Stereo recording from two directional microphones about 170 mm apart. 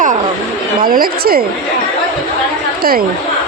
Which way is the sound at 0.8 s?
55° right (ahead or behind).